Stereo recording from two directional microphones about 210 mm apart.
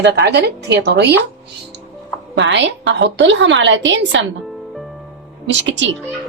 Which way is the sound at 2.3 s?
60° right (ahead or behind).